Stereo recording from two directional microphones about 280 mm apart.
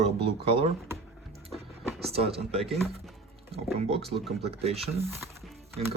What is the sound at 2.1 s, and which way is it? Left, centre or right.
Speech, right.